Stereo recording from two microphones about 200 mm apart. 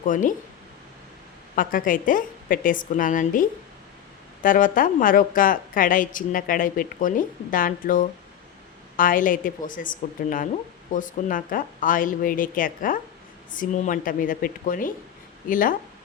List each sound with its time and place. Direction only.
0.0 s speech: 40° left (ahead or behind)
1.5 s a woman's voice: 45° left (ahead or behind)
4.4 s a woman's voice: 45° left (ahead or behind)